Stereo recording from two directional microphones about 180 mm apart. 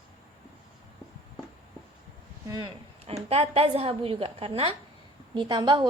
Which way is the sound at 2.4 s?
20° right (ahead or behind).